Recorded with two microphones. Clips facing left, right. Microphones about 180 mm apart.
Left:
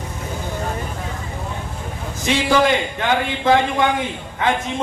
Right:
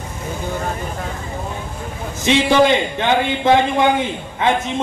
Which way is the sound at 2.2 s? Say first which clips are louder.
Right 3 dB; 25° right (ahead or behind).